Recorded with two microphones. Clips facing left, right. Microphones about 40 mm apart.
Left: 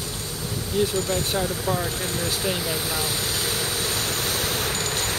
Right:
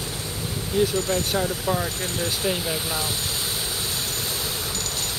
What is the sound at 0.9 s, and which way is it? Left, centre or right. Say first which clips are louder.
Speech: right 1 dB; right.